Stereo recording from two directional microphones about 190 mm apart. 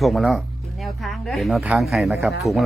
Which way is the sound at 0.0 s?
Centre (ahead or behind).